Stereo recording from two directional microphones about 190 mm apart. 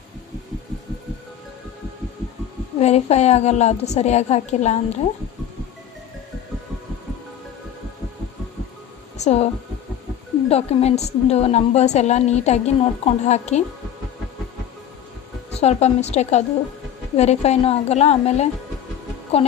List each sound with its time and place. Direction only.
2.8 s a woman's voice: 35° left (ahead or behind)
9.1 s a sound: 35° left (ahead or behind)
10.5 s a woman's voice: 30° left (ahead or behind)
15.6 s a woman's voice: 35° left (ahead or behind)